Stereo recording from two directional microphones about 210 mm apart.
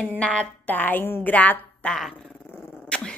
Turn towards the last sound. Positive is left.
turn(degrees=5)  # may be behind; listen again after turning